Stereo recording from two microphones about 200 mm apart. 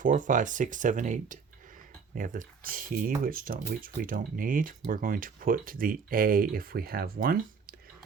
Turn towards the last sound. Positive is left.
turn(degrees=-45)  # may be behind; listen again after turning